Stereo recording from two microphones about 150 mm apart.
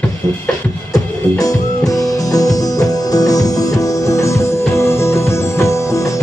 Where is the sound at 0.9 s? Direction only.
25° left (ahead or behind).